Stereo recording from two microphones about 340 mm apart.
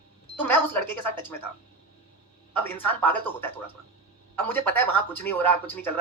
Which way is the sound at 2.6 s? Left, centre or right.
Centre.